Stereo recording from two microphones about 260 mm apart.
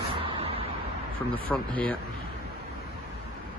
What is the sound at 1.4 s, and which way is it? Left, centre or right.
Speech, centre.